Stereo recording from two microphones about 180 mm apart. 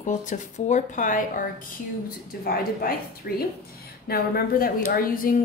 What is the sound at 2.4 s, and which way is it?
A woman's voice, 55° left (ahead or behind).